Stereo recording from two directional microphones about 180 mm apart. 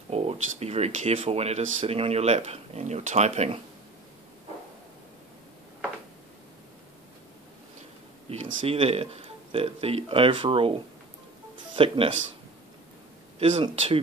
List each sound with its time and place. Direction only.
0.1 s speech: 35° right (ahead or behind)
8.6 s speech: 35° right (ahead or behind)
11.5 s music: 25° right (ahead or behind)
13.4 s speech: 35° right (ahead or behind)